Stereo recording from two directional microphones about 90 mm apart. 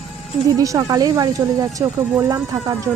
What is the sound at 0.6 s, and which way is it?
A woman's voice, 40° right (ahead or behind).